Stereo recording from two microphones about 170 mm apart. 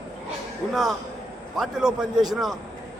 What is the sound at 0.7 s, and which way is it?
A man's voice, centre (ahead or behind).